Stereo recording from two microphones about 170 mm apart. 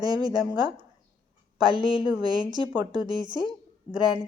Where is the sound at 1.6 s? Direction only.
25° right (ahead or behind).